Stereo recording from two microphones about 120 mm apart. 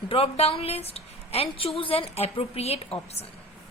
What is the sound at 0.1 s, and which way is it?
A woman's voice, 55° left (ahead or behind).